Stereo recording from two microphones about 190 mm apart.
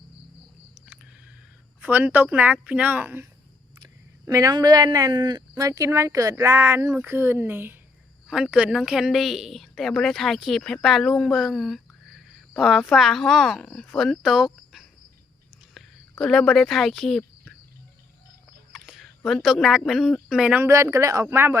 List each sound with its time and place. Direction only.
1.8 s a woman's voice: 10° right (ahead or behind)
15.7 s a sound: 5° left (ahead or behind)
18.7 s speech: centre (ahead or behind)